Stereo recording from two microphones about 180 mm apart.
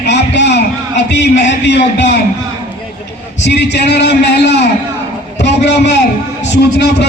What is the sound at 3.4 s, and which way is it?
Speech, 70° left (ahead or behind).